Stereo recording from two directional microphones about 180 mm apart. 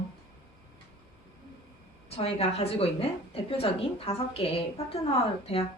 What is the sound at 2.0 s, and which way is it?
A woman's voice, 35° left (ahead or behind).